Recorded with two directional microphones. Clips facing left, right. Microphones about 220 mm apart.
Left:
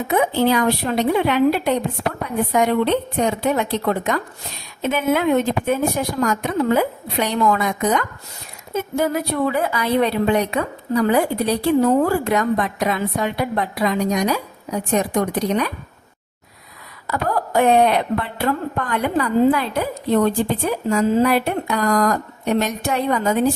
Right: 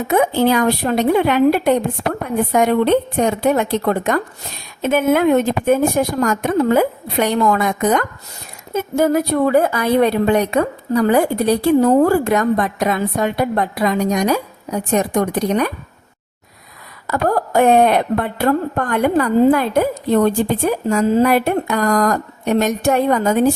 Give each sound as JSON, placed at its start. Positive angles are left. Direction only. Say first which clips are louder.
{"t": 0.1, "sound": "a woman's voice", "louder": "right 3 dB", "side_deg": -45}
{"t": 17.1, "sound": "a woman's voice", "louder": "right 4 dB", "side_deg": -45}